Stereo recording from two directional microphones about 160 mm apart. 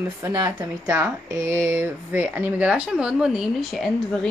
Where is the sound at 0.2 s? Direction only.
20° right (ahead or behind).